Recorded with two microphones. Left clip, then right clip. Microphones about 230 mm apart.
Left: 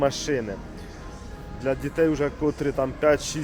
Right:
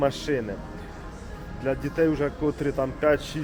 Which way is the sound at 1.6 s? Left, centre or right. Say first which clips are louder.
Left 1 dB; centre.